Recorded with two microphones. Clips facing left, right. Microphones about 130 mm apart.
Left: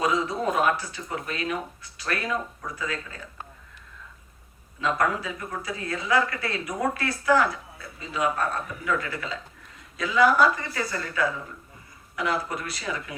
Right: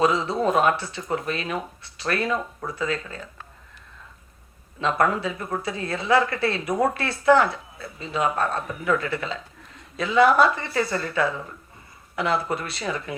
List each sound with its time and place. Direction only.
0.0 s speech: 30° right (ahead or behind)
4.8 s speech: 30° right (ahead or behind)